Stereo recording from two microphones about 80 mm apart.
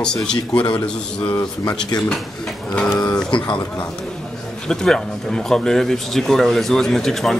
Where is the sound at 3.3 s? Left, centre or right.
Left.